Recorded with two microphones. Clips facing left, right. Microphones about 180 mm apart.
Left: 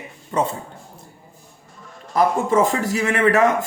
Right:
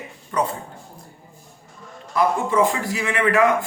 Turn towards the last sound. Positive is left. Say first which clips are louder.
# left 3 dB
turn(degrees=40)  # may be behind; listen again after turning